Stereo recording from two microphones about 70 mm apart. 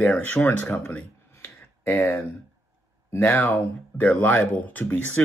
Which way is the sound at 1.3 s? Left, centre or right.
Left.